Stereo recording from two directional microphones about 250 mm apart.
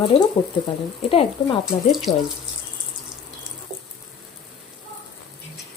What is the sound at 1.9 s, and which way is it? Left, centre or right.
Speech, centre.